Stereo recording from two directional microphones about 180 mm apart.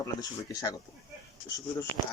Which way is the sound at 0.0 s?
20° left (ahead or behind).